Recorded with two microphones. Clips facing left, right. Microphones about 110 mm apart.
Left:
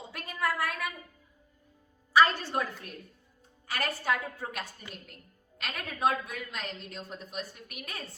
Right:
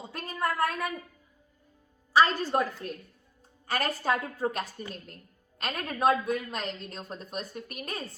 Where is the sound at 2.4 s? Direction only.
35° right (ahead or behind).